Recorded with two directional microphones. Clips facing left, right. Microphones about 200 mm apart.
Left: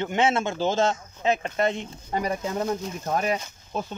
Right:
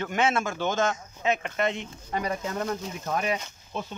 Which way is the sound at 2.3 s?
25° left (ahead or behind).